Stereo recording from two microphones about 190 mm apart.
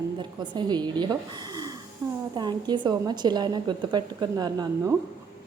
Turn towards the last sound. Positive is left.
turn(degrees=-20)  # may be behind; listen again after turning